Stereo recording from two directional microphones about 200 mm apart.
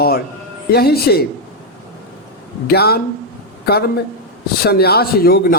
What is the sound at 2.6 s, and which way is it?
A man's voice, 50° left (ahead or behind).